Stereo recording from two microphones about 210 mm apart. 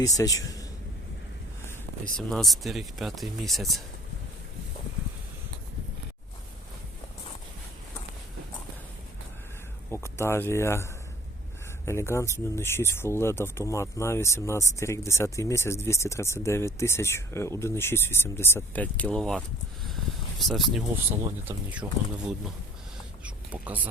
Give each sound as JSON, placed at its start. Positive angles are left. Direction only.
{"t": 0.0, "sound": "speech", "side_deg": 15}
{"t": 2.1, "sound": "speech", "side_deg": 0}
{"t": 9.9, "sound": "speech", "side_deg": 10}
{"t": 23.2, "sound": "a sound", "side_deg": -5}